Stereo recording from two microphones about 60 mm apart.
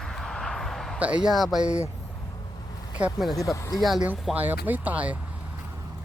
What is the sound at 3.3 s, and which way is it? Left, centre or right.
Speech, left.